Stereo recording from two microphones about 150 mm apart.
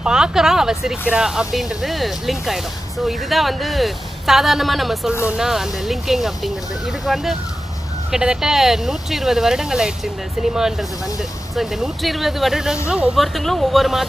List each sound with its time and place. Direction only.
0.0 s speech: 5° right (ahead or behind)